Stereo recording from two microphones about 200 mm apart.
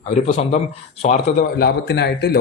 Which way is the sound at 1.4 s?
55° left (ahead or behind).